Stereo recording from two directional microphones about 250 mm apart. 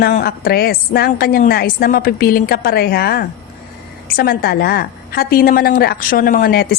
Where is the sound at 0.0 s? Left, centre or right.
Left.